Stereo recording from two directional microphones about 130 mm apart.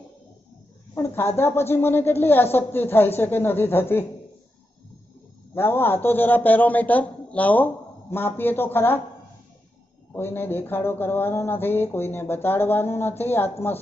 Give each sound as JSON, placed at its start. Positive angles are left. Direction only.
{"t": 0.9, "sound": "speech", "side_deg": 20}
{"t": 5.5, "sound": "speech", "side_deg": 15}
{"t": 10.2, "sound": "speech", "side_deg": 15}